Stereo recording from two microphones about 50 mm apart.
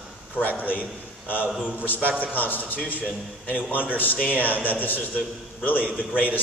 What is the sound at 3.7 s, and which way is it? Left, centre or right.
A man's voice, left.